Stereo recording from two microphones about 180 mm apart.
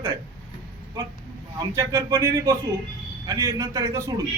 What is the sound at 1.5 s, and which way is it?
A man's voice, 20° right (ahead or behind).